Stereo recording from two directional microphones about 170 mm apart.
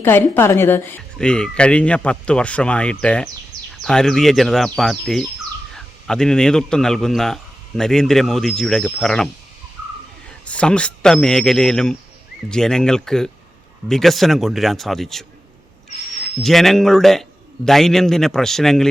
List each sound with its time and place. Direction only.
0.0 s a man's voice: 10° left (ahead or behind)
10.4 s speech: 5° left (ahead or behind)
16.4 s speech: centre (ahead or behind)